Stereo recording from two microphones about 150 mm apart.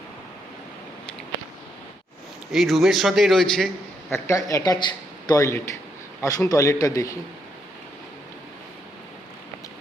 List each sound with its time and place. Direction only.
2.5 s a man's voice: centre (ahead or behind)
4.1 s speech: 20° left (ahead or behind)